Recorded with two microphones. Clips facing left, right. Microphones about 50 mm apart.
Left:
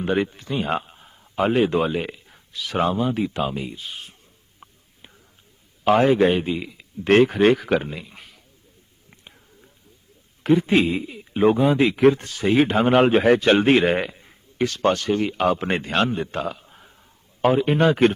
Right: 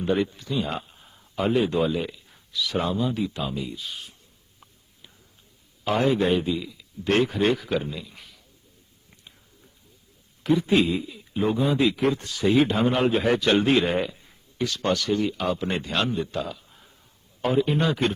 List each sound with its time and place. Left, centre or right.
0.0 s speech: left
1.0 s a sound: centre
1.4 s speech: left
4.6 s a sound: left
5.8 s speech: left
10.4 s speech: left